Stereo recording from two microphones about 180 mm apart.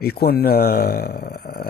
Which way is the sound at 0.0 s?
60° left (ahead or behind).